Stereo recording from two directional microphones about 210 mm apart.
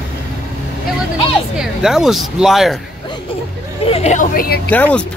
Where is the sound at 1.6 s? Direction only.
Centre (ahead or behind).